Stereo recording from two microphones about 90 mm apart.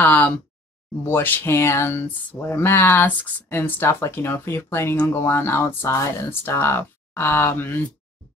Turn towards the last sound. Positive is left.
turn(degrees=25)  # may be behind; listen again after turning